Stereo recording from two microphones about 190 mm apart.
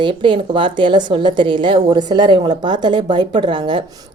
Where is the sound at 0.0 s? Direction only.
25° right (ahead or behind).